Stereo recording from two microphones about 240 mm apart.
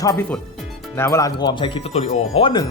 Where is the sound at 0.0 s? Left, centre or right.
Centre.